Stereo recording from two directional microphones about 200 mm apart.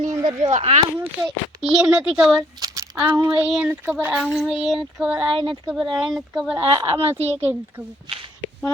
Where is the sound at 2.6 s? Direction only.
15° right (ahead or behind).